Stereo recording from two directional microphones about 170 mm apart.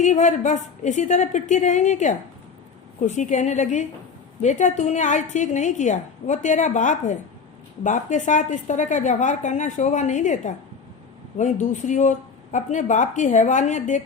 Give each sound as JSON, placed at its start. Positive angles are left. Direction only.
{"t": 0.0, "sound": "a woman's voice", "side_deg": 45}